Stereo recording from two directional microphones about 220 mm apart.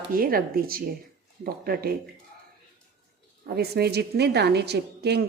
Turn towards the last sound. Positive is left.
turn(degrees=-50)  # may be behind; listen again after turning